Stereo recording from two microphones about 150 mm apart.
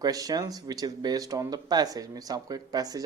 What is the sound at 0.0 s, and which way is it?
Speech, 25° right (ahead or behind).